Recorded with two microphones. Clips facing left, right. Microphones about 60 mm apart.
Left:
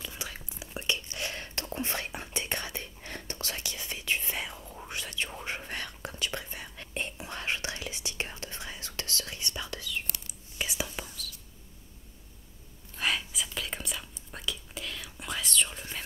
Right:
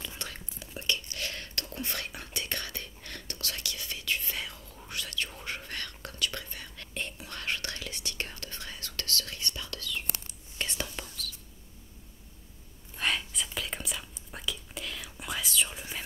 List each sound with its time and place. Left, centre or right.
0.0 s whispering: centre
10.6 s whispering: centre
12.9 s whispering: centre